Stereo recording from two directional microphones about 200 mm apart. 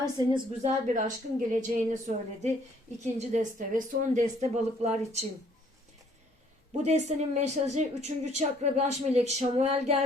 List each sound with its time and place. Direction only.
0.0 s a woman's voice: 20° right (ahead or behind)
0.9 s a woman's voice: 40° right (ahead or behind)
6.8 s a woman's voice: 35° right (ahead or behind)